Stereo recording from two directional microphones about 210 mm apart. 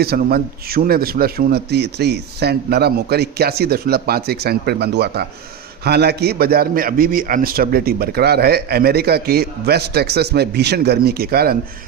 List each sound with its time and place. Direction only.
0.0 s a man's voice: 45° right (ahead or behind)